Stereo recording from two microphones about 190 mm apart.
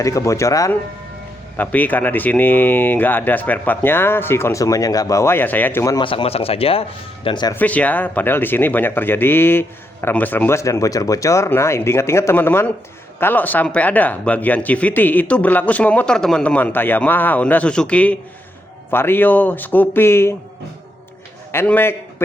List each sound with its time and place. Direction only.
0.0 s speech: 15° left (ahead or behind)
6.1 s speech: 30° left (ahead or behind)
7.5 s speech: 10° left (ahead or behind)
21.5 s speech: 10° left (ahead or behind)